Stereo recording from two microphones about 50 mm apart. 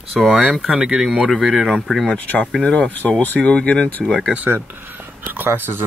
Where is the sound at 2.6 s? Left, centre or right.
Left.